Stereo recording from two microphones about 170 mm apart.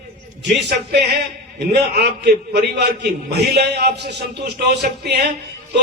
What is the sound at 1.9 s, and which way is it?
A man's voice, 75° right (ahead or behind).